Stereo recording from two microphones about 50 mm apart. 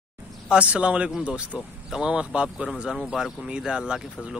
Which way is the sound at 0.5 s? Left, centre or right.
Right.